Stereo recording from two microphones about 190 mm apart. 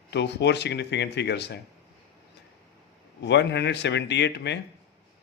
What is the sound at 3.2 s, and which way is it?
Speech, 65° left (ahead or behind).